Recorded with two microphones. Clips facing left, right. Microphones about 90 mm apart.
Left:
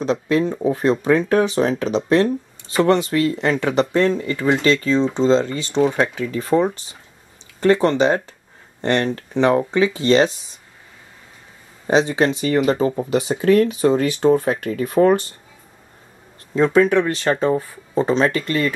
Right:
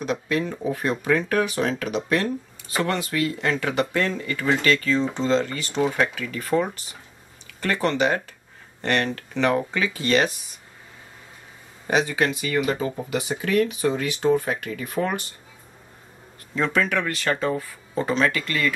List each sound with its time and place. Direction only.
0.0 s speech: 30° left (ahead or behind)
11.9 s speech: 25° left (ahead or behind)
16.5 s speech: 25° left (ahead or behind)